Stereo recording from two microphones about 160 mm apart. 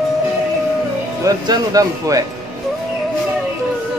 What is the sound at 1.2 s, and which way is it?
Speech, 20° right (ahead or behind).